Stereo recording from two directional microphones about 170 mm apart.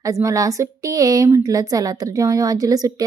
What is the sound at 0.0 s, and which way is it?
A woman's voice, 20° right (ahead or behind).